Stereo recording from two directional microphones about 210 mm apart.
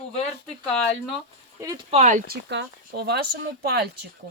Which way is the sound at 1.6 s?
15° right (ahead or behind).